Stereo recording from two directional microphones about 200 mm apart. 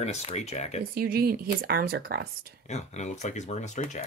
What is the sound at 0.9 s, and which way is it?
Speech, 50° right (ahead or behind).